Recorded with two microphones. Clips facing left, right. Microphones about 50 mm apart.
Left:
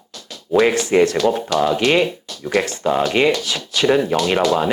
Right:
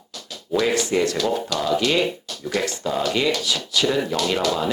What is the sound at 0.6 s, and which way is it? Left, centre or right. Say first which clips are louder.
Speech: left 6 dB; left.